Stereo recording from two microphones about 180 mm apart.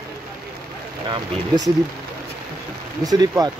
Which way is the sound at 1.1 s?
20° right (ahead or behind).